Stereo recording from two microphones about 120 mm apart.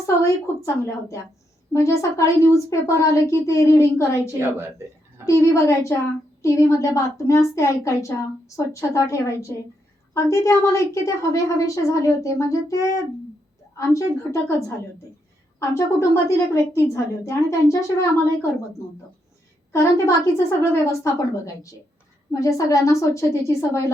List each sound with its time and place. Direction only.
0.0 s a woman's voice: 25° left (ahead or behind)
4.4 s a woman's voice: 20° right (ahead or behind)
5.2 s a woman's voice: 25° left (ahead or behind)
15.5 s a woman's voice: 25° left (ahead or behind)
19.7 s a woman's voice: 25° left (ahead or behind)